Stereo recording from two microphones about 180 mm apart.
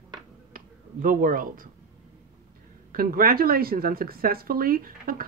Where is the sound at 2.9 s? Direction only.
55° right (ahead or behind).